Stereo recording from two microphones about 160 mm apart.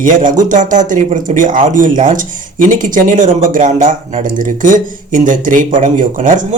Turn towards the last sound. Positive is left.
turn(degrees=-55)  # may be behind; listen again after turning